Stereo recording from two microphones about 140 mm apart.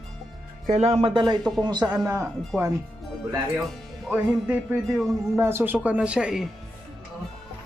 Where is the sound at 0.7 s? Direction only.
50° right (ahead or behind).